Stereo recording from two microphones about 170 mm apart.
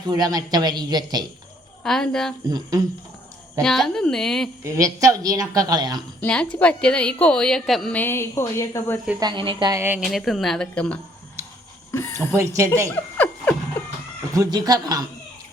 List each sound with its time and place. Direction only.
0.1 s a woman's voice: 20° right (ahead or behind)
1.8 s a woman's voice: 5° left (ahead or behind)
2.5 s a woman's voice: 20° right (ahead or behind)
3.6 s a woman's voice: centre (ahead or behind)
4.6 s a woman's voice: 20° right (ahead or behind)
6.1 s a woman's voice: 5° left (ahead or behind)
9.2 s a woman's voice: 30° right (ahead or behind)
9.7 s speech: 15° right (ahead or behind)
10.1 s a woman's voice: centre (ahead or behind)
11.4 s a sound: 15° right (ahead or behind)
11.9 s speech: 15° left (ahead or behind)
12.3 s speech: 15° right (ahead or behind)
13.1 s a sound: 10° left (ahead or behind)
14.3 s a woman's voice: 20° right (ahead or behind)